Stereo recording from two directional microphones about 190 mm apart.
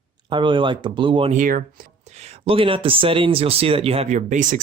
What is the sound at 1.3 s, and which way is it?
Speech, 45° right (ahead or behind).